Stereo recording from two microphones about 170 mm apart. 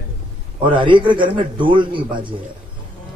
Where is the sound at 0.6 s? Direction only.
30° right (ahead or behind).